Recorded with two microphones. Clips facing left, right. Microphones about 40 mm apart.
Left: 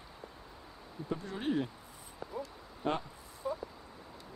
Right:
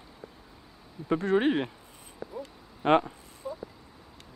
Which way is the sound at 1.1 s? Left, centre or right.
Right.